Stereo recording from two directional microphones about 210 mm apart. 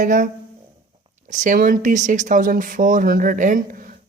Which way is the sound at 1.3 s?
35° right (ahead or behind).